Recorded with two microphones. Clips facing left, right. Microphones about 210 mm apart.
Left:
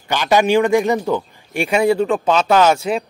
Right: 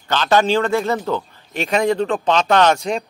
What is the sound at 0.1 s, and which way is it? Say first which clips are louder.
A man's voice: left 2 dB; 10° left (ahead or behind).